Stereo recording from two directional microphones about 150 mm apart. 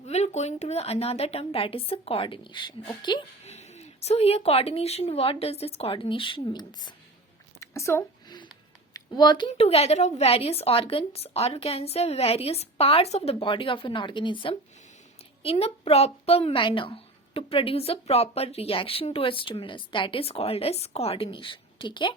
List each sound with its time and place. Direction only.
0.1 s a woman's voice: 45° left (ahead or behind); by 3.2 s 30° left (ahead or behind)
3.4 s speech: 50° left (ahead or behind); by 8.0 s 20° left (ahead or behind)
8.9 s a sound: 30° left (ahead or behind)
9.5 s a woman's voice: 40° left (ahead or behind)